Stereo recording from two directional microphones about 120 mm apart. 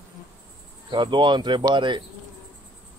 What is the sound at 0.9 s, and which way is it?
Speech, 40° right (ahead or behind).